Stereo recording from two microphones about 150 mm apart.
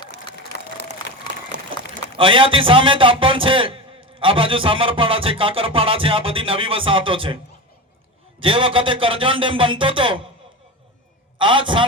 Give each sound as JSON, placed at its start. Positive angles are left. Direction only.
{"t": 2.1, "sound": "a man's voice", "side_deg": -35}
{"t": 8.4, "sound": "a man's voice", "side_deg": -35}
{"t": 11.3, "sound": "a man's voice", "side_deg": -35}